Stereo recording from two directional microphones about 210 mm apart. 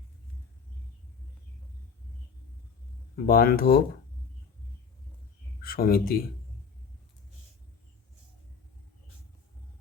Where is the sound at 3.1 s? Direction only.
45° left (ahead or behind).